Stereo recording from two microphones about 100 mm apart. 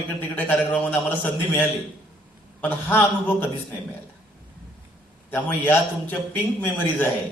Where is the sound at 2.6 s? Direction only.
20° left (ahead or behind).